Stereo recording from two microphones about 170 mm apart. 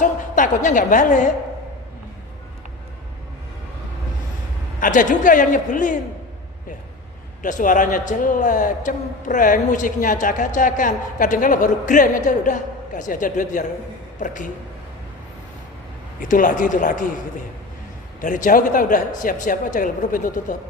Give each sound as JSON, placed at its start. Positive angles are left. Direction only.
{"t": 0.0, "sound": "a man's voice", "side_deg": 50}
{"t": 4.8, "sound": "a man's voice", "side_deg": 50}
{"t": 7.4, "sound": "a man's voice", "side_deg": 50}
{"t": 16.2, "sound": "a man's voice", "side_deg": 50}
{"t": 18.2, "sound": "a man's voice", "side_deg": 50}